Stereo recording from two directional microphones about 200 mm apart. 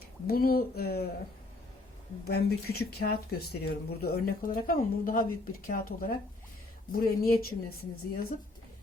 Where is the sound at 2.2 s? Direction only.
50° left (ahead or behind).